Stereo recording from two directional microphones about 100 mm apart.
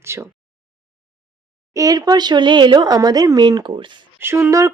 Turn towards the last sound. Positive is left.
turn(degrees=-30)  # may be behind; listen again after turning